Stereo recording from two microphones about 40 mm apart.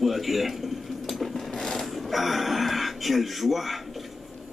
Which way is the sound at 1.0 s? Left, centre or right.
Centre.